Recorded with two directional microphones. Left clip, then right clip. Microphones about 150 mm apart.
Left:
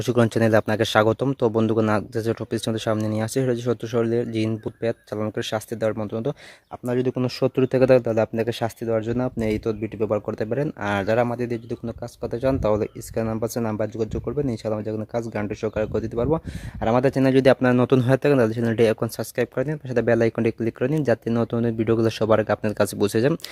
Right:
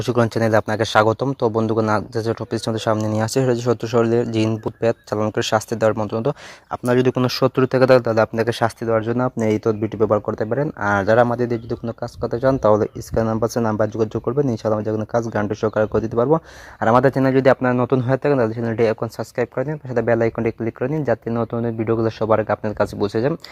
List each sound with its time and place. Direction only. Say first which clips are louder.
0.0 s speech: right 2 dB; 40° left (ahead or behind); by 6.3 s 15° left (ahead or behind)
6.7 s speech: right 7 dB; centre (ahead or behind)
7.2 s speech: right 4 dB; 20° left (ahead or behind)
9.4 s speech: right 5 dB; 5° left (ahead or behind)
10.2 s speech: right 4 dB; 20° left (ahead or behind)
11.0 s speech: right 6 dB; centre (ahead or behind)
16.8 s speech: right 5 dB; 20° left (ahead or behind)
17.2 s speech: right 2 dB; 35° left (ahead or behind)
20.7 s speech: right 1 dB; 55° left (ahead or behind)